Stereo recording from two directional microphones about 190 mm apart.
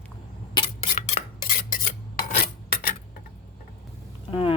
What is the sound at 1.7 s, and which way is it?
Filing, 45° left (ahead or behind).